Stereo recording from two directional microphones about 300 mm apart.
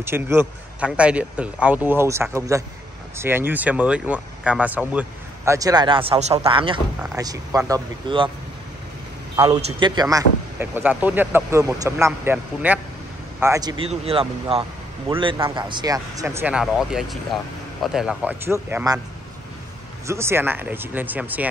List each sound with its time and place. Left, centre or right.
0.0 s speech: centre
9.4 s speech: centre
20.1 s speech: centre